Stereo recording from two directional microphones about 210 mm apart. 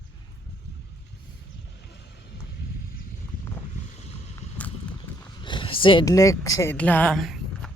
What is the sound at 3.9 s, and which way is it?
Boat, 30° left (ahead or behind).